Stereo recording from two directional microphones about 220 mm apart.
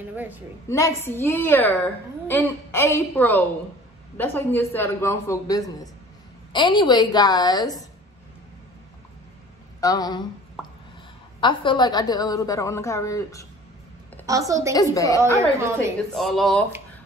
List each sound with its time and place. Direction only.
0.1 s a woman's voice: 10° right (ahead or behind)
0.7 s a woman's voice: 15° left (ahead or behind)
9.8 s a woman's voice: 15° left (ahead or behind)
10.6 s a sound: 5° right (ahead or behind)
11.4 s a woman's voice: 20° left (ahead or behind)
14.2 s a woman's voice: 15° right (ahead or behind)
15.0 s a woman's voice: 15° left (ahead or behind)
15.5 s a woman's voice: 15° right (ahead or behind)
16.1 s speech: centre (ahead or behind)